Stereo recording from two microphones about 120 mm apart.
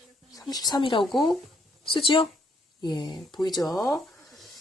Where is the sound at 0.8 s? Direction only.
45° left (ahead or behind).